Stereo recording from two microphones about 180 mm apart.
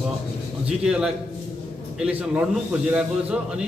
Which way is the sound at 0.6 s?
5° right (ahead or behind).